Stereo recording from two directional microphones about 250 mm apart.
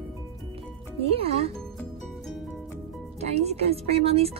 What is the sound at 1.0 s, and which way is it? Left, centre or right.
Speech, right.